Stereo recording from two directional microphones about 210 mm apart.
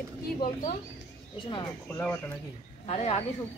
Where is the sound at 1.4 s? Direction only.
20° left (ahead or behind).